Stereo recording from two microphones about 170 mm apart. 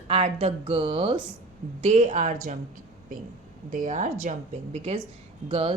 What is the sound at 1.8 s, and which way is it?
Speech, 40° right (ahead or behind).